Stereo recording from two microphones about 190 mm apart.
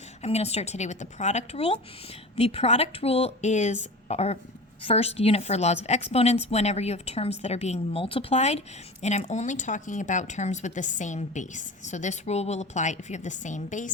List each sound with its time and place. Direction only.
0.2 s a woman's voice: 35° left (ahead or behind)